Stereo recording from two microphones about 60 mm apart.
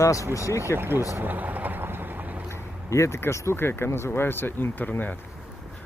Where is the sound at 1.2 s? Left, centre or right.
Right.